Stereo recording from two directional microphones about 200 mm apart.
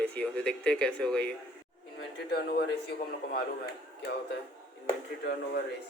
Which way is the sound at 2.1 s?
55° left (ahead or behind).